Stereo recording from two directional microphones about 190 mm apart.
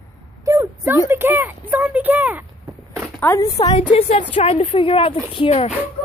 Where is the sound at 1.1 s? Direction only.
10° right (ahead or behind).